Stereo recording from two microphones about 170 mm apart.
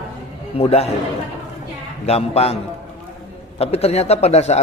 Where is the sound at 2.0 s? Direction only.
35° left (ahead or behind).